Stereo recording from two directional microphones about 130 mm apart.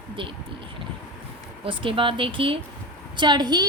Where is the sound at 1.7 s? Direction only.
40° right (ahead or behind).